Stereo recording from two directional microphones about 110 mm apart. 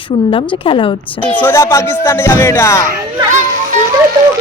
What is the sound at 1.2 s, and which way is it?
Speech, 15° left (ahead or behind).